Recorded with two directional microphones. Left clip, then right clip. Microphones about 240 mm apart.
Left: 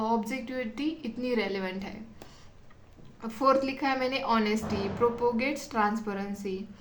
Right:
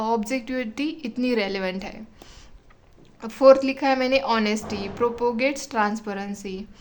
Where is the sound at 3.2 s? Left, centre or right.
Right.